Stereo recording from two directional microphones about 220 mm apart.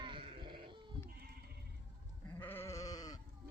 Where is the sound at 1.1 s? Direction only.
45° right (ahead or behind).